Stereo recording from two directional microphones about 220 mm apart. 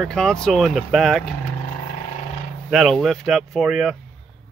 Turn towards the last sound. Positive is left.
turn(degrees=0)  # may be behind; listen again after turning